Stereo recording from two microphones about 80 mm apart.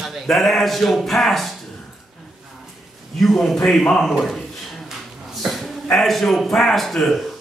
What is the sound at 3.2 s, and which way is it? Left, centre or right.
A man's voice, centre.